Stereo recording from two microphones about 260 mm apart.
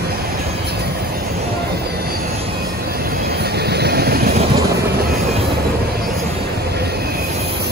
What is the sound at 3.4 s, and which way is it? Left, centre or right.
Vehicle, right.